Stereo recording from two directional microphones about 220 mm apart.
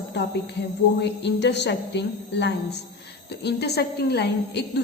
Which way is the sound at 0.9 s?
50° left (ahead or behind).